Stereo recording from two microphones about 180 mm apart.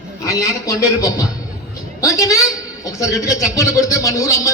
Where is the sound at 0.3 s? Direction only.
20° left (ahead or behind).